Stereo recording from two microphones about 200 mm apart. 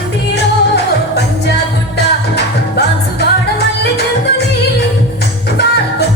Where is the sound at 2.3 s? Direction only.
55° left (ahead or behind).